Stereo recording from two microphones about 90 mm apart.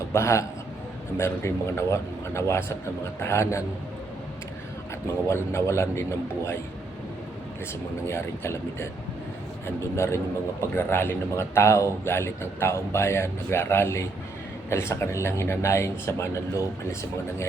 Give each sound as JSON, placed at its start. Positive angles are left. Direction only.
{"t": 0.1, "sound": "speech", "side_deg": 30}
{"t": 5.3, "sound": "speech", "side_deg": 30}
{"t": 8.0, "sound": "a man's voice", "side_deg": 30}